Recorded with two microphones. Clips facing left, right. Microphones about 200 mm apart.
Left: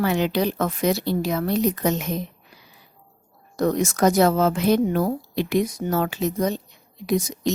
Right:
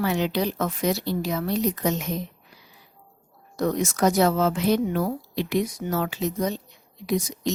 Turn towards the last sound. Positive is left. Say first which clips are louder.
# left 3 dB
turn(degrees=45)  # may be behind; listen again after turning